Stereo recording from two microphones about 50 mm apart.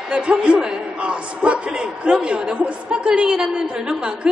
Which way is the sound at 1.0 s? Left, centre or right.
Right.